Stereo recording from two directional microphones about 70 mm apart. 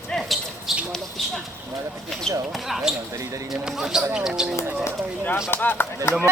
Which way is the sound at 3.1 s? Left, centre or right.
Right.